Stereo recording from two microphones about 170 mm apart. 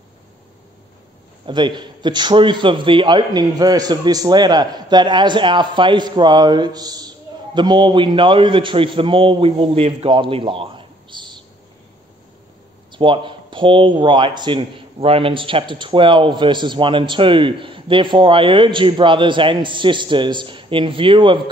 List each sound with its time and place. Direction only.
1.4 s a man's voice: 25° right (ahead or behind)
12.9 s a man's voice: 30° right (ahead or behind)